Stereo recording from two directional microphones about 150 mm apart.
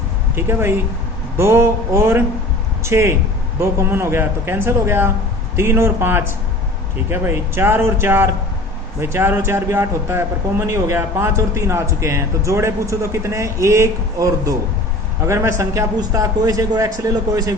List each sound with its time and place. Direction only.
0.3 s a man's voice: 15° right (ahead or behind)